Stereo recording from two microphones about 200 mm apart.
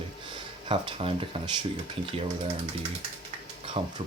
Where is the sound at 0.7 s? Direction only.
25° right (ahead or behind).